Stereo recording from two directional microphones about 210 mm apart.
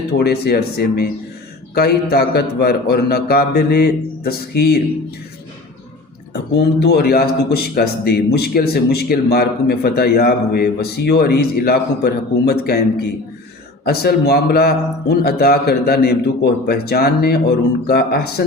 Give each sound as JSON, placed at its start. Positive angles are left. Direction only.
{"t": 0.2, "sound": "speech", "side_deg": 50}
{"t": 6.3, "sound": "speech", "side_deg": 50}
{"t": 13.8, "sound": "speech", "side_deg": 50}